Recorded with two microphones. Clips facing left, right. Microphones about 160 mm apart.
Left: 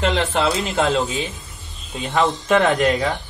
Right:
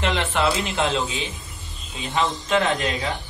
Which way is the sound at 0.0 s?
40° left (ahead or behind).